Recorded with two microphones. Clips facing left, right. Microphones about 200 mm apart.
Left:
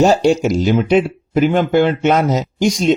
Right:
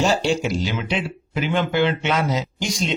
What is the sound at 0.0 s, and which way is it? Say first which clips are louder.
Speech: left 8 dB; 45° left (ahead or behind).